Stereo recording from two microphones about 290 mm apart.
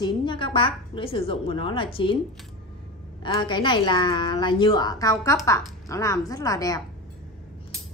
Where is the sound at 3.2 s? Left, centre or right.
Centre.